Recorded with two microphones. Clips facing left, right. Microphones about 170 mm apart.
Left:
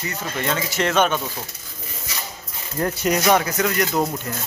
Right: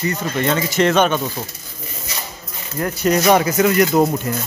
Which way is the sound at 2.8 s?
30° left (ahead or behind).